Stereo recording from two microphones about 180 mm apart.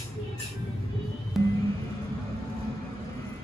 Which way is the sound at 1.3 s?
Centre (ahead or behind).